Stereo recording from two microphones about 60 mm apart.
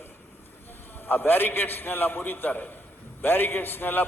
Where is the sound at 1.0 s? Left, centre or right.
Left.